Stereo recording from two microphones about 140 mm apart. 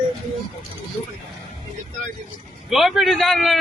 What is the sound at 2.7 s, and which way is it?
Speech, centre (ahead or behind).